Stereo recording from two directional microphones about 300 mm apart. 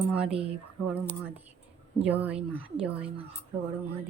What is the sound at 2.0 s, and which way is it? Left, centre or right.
Speech, centre.